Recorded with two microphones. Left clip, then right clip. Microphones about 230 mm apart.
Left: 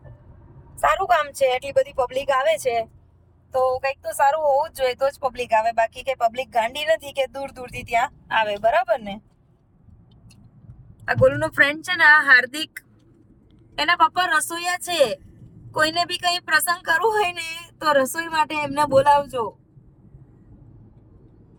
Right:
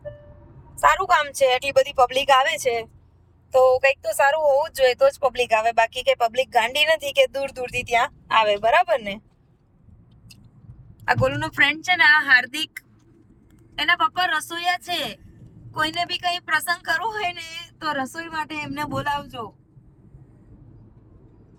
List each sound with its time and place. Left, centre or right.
0.9 s speech: centre
4.0 s speech: centre
11.0 s speech: centre; by 19.5 s left